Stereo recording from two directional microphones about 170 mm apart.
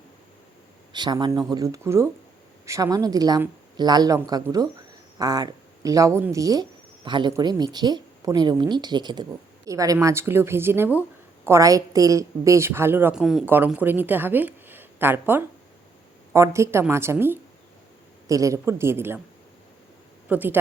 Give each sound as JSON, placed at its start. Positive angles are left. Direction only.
{"t": 0.9, "sound": "a woman's voice", "side_deg": -25}
{"t": 13.2, "sound": "a woman's voice", "side_deg": 0}
{"t": 20.2, "sound": "a woman's voice", "side_deg": -10}